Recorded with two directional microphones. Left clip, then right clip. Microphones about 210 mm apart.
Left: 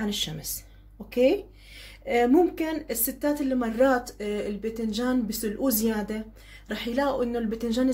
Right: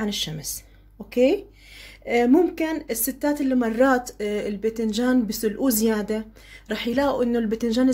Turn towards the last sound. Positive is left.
turn(degrees=-30)  # may be behind; listen again after turning